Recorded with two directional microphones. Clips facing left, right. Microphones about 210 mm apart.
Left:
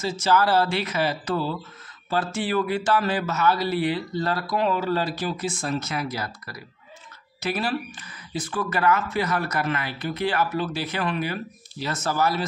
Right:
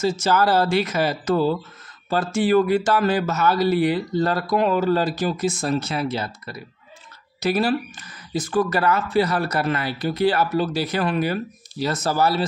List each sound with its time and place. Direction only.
0.0 s a man's voice: 45° right (ahead or behind); by 6.6 s 25° right (ahead or behind)
7.3 s speech: 40° right (ahead or behind)